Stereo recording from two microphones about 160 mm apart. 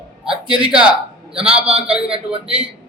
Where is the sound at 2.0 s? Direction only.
35° right (ahead or behind).